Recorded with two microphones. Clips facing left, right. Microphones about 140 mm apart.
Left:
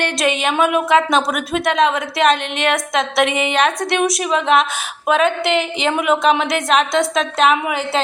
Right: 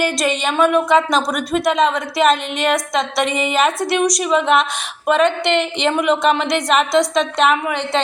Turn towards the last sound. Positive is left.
turn(degrees=5)  # may be behind; listen again after turning